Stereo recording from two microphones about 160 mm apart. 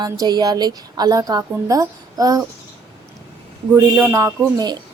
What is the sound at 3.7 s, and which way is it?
Speech, 15° right (ahead or behind).